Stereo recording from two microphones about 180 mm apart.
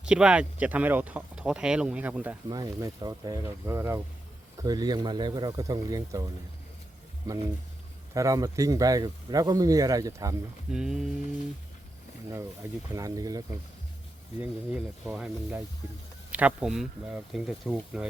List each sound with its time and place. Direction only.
0.0 s speech: 5° right (ahead or behind)
2.5 s a man's voice: 20° right (ahead or behind)
8.1 s a man's voice: 20° right (ahead or behind)
10.7 s speech: 5° right (ahead or behind)
12.3 s a man's voice: 15° right (ahead or behind)
14.4 s speech: 10° right (ahead or behind)